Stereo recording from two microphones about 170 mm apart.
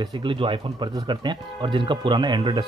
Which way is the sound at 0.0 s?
25° right (ahead or behind).